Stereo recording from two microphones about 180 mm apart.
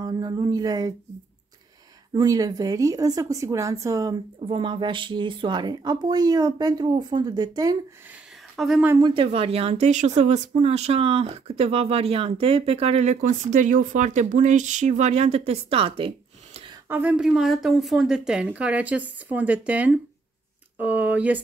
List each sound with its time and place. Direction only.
0.0 s a sound: 20° right (ahead or behind)
2.1 s speech: 20° right (ahead or behind)
8.5 s speech: centre (ahead or behind)
8.9 s speech: 25° right (ahead or behind)
16.9 s a woman's voice: 10° right (ahead or behind)